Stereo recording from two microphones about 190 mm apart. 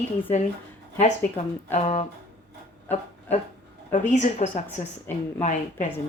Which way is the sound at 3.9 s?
40° left (ahead or behind).